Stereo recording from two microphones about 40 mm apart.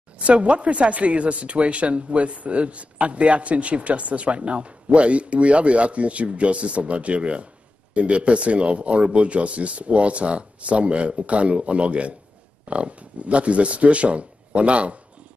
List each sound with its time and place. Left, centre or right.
0.2 s speech: right